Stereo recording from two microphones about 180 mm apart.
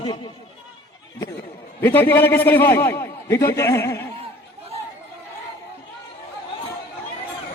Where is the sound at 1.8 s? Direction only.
10° left (ahead or behind).